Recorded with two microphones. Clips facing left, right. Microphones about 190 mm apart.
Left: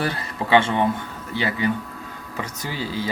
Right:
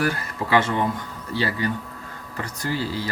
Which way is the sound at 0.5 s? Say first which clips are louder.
Left 3 dB; 20° left (ahead or behind).